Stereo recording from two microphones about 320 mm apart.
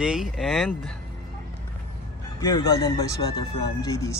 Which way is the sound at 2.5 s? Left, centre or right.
Centre.